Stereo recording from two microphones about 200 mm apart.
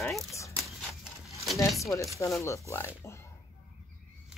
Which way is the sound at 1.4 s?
Centre (ahead or behind).